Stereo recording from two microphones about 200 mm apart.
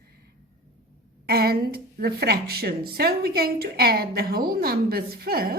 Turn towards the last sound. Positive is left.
turn(degrees=-50)  # may be behind; listen again after turning